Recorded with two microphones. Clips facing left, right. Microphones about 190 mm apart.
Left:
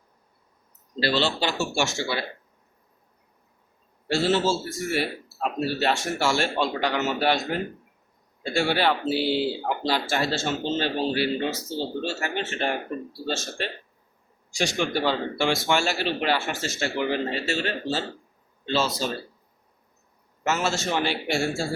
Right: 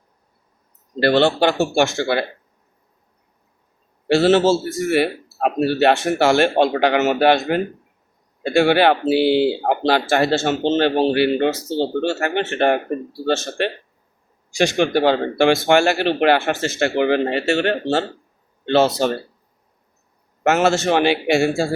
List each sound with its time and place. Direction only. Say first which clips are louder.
0.9 s speech: right 9 dB; 55° right (ahead or behind)
4.1 s a man's voice: right 9 dB; 75° right (ahead or behind)
20.4 s a man's voice: right 9 dB; 65° right (ahead or behind)